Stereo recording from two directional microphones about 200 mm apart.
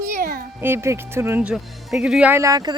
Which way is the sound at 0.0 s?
45° right (ahead or behind).